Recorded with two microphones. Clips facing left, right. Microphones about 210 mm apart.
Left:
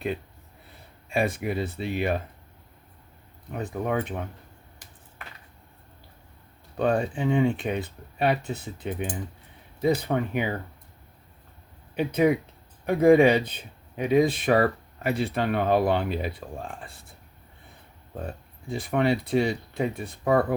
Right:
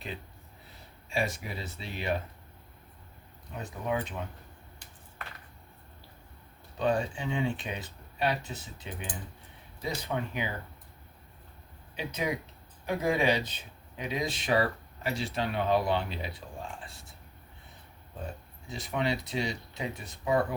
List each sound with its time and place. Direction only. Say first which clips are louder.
1.1 s speech: left 7 dB; 55° left (ahead or behind)
3.6 s speech: left 5 dB; 55° left (ahead or behind)
6.7 s speech: left 5 dB; 55° left (ahead or behind)
11.9 s speech: left 11 dB; 55° left (ahead or behind)
18.7 s speech: left 7 dB; 55° left (ahead or behind)